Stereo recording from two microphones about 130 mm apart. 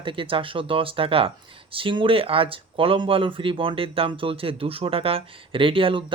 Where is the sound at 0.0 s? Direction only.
40° right (ahead or behind).